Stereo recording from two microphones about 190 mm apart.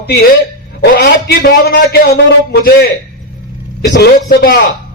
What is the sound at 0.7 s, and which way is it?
A man's voice, 55° left (ahead or behind).